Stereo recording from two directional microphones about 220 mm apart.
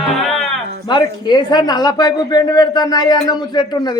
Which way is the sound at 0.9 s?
20° left (ahead or behind).